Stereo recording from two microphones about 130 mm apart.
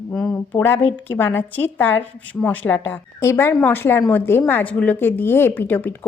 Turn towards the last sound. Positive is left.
turn(degrees=15)  # may be behind; listen again after turning